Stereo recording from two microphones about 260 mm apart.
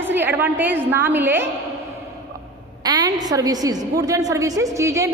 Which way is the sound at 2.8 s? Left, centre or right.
Centre.